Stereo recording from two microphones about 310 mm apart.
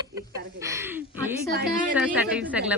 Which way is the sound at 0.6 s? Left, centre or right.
Centre.